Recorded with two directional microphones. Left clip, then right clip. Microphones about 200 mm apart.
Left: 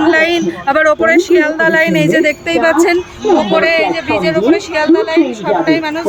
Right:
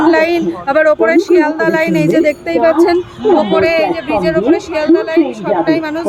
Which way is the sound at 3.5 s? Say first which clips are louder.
Even; centre (ahead or behind).